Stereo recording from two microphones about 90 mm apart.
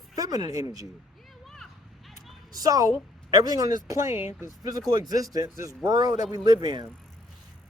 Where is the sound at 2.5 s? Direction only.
40° right (ahead or behind).